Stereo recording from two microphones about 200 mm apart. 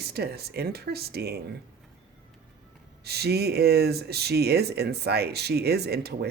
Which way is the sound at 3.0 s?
55° right (ahead or behind).